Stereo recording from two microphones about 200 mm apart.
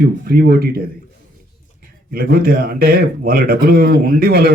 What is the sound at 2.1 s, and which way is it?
A man's voice, 50° right (ahead or behind).